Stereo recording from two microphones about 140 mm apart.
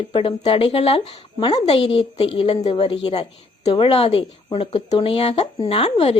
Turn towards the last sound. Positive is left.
turn(degrees=45)  # may be behind; listen again after turning